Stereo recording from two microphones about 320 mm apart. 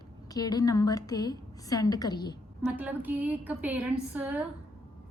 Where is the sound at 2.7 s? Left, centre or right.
Centre.